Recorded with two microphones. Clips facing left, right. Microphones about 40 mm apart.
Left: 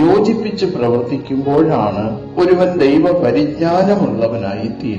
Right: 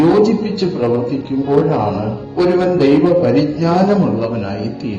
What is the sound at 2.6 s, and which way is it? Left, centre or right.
Speech, left.